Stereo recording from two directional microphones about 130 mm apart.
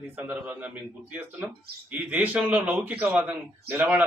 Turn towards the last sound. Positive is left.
turn(degrees=-15)  # may be behind; listen again after turning